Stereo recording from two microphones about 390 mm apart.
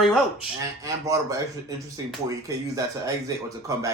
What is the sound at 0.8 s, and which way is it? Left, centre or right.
Speech, centre.